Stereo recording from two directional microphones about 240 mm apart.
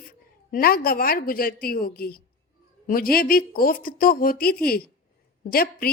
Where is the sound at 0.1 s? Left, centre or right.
Left.